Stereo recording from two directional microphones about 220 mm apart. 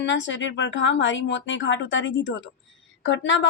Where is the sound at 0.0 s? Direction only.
55° left (ahead or behind).